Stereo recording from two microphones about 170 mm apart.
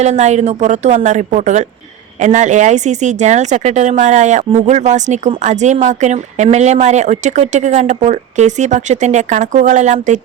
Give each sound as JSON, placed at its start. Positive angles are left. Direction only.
{"t": 0.0, "sound": "speech", "side_deg": -40}